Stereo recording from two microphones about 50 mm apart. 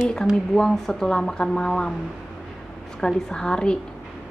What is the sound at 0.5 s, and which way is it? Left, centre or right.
Speech, centre.